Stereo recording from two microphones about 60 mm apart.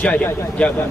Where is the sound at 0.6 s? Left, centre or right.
Left.